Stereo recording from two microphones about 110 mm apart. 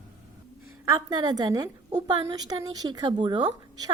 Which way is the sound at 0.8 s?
35° right (ahead or behind).